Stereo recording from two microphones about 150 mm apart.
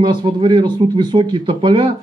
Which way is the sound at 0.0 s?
35° right (ahead or behind).